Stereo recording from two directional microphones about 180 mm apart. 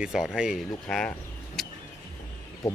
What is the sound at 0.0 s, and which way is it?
Speech, centre (ahead or behind).